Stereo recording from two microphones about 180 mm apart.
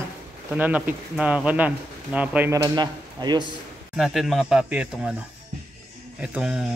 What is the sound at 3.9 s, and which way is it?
Speech, centre (ahead or behind).